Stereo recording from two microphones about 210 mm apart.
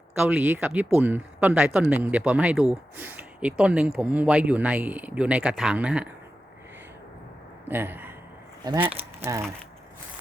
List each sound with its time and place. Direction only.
0.3 s speech: 5° right (ahead or behind)
7.7 s speech: 10° right (ahead or behind)